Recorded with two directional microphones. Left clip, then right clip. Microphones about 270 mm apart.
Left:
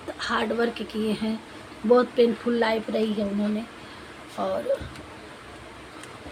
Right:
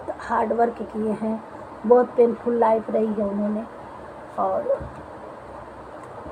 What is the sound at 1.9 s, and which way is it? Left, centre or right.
Speech, left.